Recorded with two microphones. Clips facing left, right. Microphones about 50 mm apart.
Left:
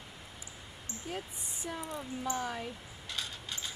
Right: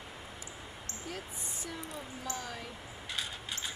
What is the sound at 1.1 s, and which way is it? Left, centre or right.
Speech, centre.